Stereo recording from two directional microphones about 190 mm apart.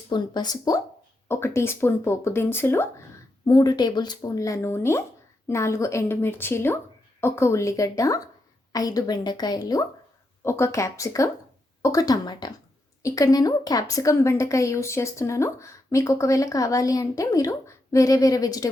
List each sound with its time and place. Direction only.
0.1 s a woman's voice: 20° left (ahead or behind)